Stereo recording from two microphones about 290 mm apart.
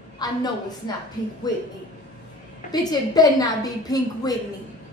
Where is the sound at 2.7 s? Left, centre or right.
Centre.